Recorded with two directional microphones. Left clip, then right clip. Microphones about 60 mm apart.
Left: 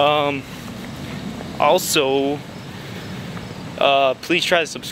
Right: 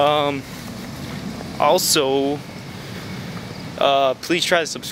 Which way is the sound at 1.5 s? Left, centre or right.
Centre.